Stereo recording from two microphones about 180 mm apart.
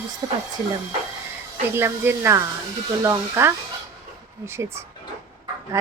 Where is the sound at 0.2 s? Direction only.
25° right (ahead or behind).